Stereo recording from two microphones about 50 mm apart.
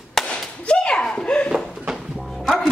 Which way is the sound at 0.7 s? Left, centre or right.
Centre.